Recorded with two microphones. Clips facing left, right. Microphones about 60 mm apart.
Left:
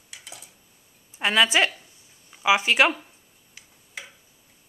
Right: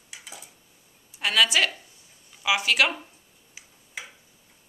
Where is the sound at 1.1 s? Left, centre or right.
Left.